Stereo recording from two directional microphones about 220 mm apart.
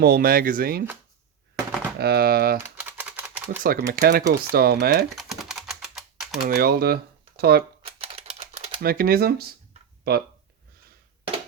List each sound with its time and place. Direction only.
0.0 s speech: 45° right (ahead or behind)
2.0 s speech: 45° right (ahead or behind)
3.0 s typewriter: 5° right (ahead or behind)
3.6 s speech: 40° right (ahead or behind)
5.0 s typing: centre (ahead or behind)
6.5 s speech: 45° right (ahead or behind)
7.9 s typing: 25° right (ahead or behind)
8.8 s speech: 40° right (ahead or behind)